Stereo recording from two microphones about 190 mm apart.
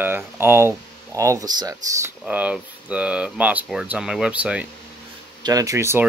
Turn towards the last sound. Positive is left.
turn(degrees=-15)  # may be behind; listen again after turning